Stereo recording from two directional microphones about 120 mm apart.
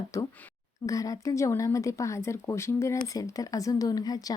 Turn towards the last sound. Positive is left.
turn(degrees=30)  # may be behind; listen again after turning